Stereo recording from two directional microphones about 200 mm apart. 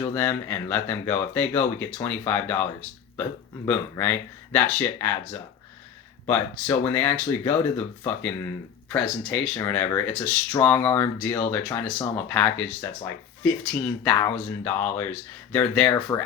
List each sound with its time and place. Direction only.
0.0 s speech: 10° left (ahead or behind)
3.7 s speech: 10° left (ahead or behind)
9.6 s speech: 15° left (ahead or behind)
15.9 s speech: 20° left (ahead or behind)